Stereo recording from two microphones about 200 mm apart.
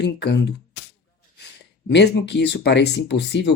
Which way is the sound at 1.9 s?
60° left (ahead or behind).